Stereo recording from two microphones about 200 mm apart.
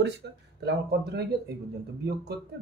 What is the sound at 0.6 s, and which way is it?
Speech, 55° right (ahead or behind).